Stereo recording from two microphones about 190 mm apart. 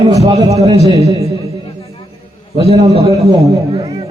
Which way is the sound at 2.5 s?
35° right (ahead or behind).